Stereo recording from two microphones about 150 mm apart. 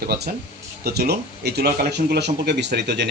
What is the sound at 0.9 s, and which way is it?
Speech, 90° right.